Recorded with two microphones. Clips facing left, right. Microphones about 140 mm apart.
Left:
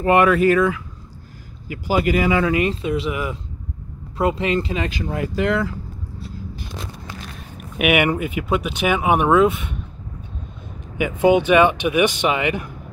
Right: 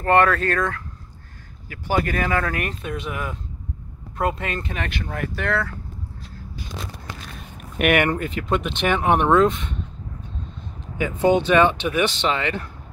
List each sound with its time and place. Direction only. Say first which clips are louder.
0.0 s speech: left 3 dB; 10° left (ahead or behind)
7.5 s speech: left 1 dB; 5° left (ahead or behind)
11.0 s speech: left 3 dB; 15° left (ahead or behind)